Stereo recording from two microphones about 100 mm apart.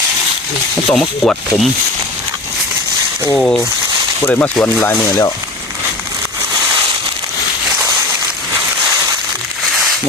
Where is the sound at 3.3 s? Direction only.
5° left (ahead or behind).